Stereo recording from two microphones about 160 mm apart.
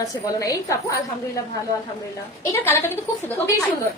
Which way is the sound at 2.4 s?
15° left (ahead or behind).